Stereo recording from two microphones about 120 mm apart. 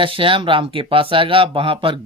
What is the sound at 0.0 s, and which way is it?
Speech, 45° right (ahead or behind).